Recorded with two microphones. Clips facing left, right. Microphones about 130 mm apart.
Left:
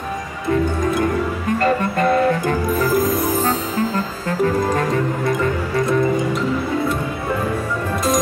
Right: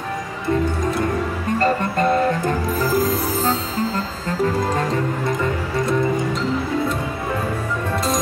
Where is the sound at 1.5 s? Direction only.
35° right (ahead or behind).